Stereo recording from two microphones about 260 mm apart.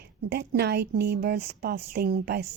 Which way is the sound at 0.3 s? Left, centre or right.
Right.